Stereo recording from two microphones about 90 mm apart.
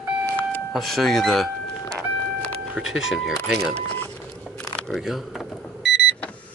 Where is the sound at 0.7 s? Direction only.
Centre (ahead or behind).